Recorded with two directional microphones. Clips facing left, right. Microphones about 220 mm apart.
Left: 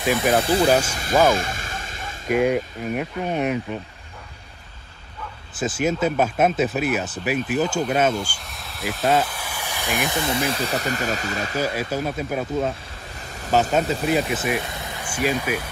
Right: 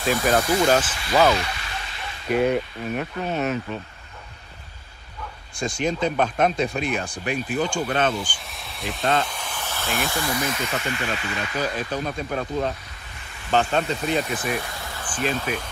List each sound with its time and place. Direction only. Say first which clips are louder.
0.2 s speech: left 1 dB; 30° left (ahead or behind)
0.7 s speech: left 1 dB; 10° left (ahead or behind)
0.9 s a sound: left 1 dB; 45° left (ahead or behind)
2.2 s speech: left 1 dB; 10° left (ahead or behind)
5.5 s speech: left 2 dB; 5° left (ahead or behind); by 11.6 s 40° left (ahead or behind)
11.6 s speech: left 2 dB; 10° left (ahead or behind)
13.2 s a sound: left 10 dB; 40° left (ahead or behind)
13.7 s speech: left 3 dB; 5° left (ahead or behind)
14.6 s speech: left 2 dB; 20° left (ahead or behind)